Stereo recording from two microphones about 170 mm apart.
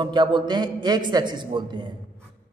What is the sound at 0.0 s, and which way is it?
A man's voice, 25° right (ahead or behind).